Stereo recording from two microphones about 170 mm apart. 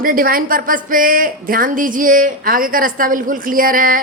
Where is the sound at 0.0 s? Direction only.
55° right (ahead or behind).